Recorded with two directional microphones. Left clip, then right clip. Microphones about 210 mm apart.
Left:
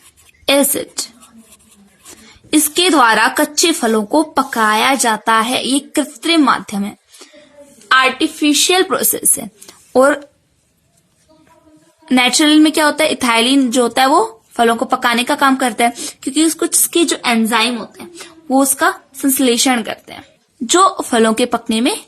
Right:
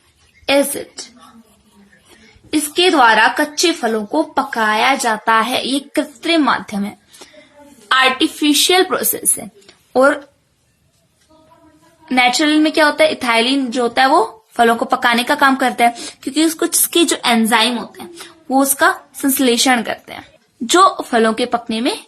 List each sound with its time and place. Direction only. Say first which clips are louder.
0.4 s a woman's voice: left 1 dB; 45° left (ahead or behind)
2.5 s a woman's voice: left 1 dB; 40° left (ahead or behind)
12.0 s a woman's voice: left 1 dB; 30° left (ahead or behind)